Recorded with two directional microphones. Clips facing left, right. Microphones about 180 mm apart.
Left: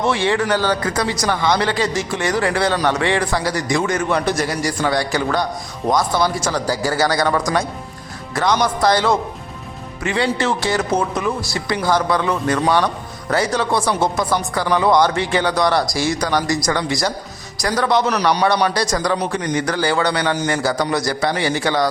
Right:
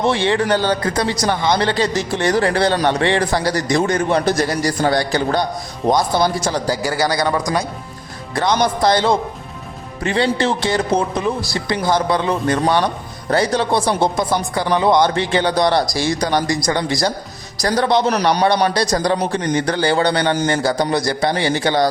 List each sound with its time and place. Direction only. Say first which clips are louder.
0.0 s speech: right 1 dB; 30° right (ahead or behind)